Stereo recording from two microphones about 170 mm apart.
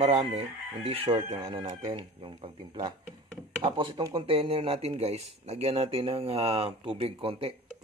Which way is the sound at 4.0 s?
20° right (ahead or behind).